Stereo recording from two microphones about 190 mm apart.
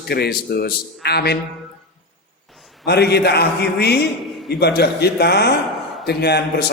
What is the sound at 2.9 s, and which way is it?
Speech, 60° left (ahead or behind).